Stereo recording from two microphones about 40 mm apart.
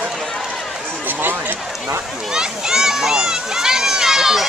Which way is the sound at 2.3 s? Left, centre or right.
Centre.